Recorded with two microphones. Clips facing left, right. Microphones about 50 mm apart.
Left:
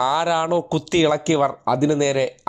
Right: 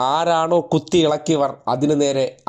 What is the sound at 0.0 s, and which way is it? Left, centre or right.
Speech, centre.